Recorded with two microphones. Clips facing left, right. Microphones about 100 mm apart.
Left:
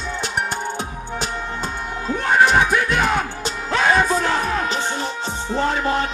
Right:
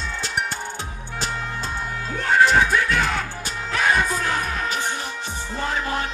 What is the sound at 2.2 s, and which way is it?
Music, 20° left (ahead or behind).